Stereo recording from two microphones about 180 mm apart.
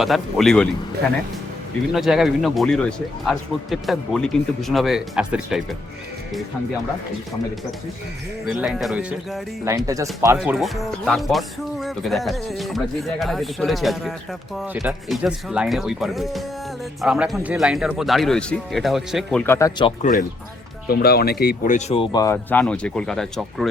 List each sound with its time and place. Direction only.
0.0 s speech: centre (ahead or behind)
1.9 s speech: centre (ahead or behind)
8.4 s speech: centre (ahead or behind)
9.6 s speech: 20° right (ahead or behind)
10.3 s speech: 5° right (ahead or behind); by 19.7 s 15° left (ahead or behind)
20.0 s speech: 45° left (ahead or behind)
20.9 s speech: 60° left (ahead or behind); by 23.6 s centre (ahead or behind)